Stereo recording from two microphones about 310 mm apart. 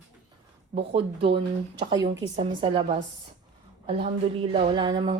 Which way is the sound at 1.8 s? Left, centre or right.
Centre.